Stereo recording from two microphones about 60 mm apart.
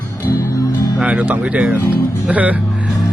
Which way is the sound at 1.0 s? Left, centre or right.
Centre.